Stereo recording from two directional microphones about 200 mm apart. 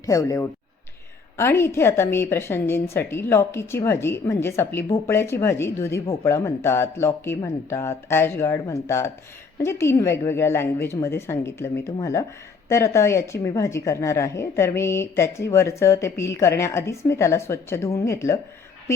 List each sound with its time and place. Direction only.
0.0 s speech: 15° left (ahead or behind)